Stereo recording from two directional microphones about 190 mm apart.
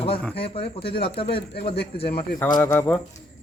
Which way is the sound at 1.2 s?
60° left (ahead or behind).